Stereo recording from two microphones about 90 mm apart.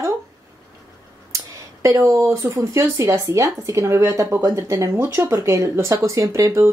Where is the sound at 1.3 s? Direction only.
35° right (ahead or behind).